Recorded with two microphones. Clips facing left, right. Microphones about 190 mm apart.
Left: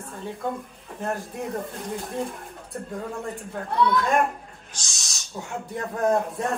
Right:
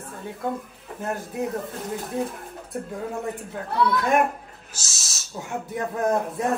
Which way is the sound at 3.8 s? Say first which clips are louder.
Right 1 dB; centre (ahead or behind).